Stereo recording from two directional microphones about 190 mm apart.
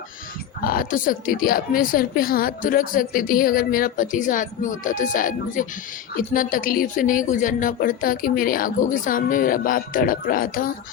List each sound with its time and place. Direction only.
0.6 s a woman's voice: 50° left (ahead or behind)